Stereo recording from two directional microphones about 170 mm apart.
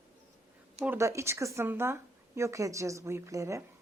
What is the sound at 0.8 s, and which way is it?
Speech, 15° right (ahead or behind).